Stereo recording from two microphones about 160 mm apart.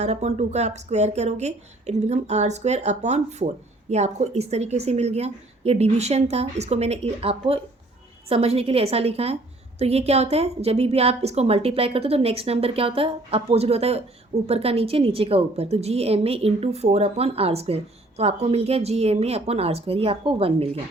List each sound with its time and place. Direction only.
0.0 s a woman's voice: 45° right (ahead or behind)